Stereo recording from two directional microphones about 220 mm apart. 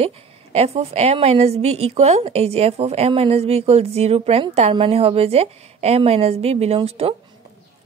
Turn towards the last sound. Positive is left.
turn(degrees=-25)  # may be behind; listen again after turning